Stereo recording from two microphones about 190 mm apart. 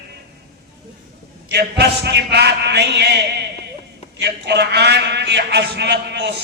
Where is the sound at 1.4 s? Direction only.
60° right (ahead or behind).